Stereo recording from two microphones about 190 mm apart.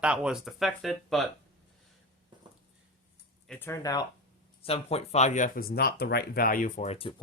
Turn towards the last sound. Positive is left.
turn(degrees=30)  # may be behind; listen again after turning